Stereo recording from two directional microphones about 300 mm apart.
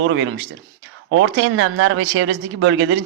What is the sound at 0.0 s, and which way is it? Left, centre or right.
Speech, right.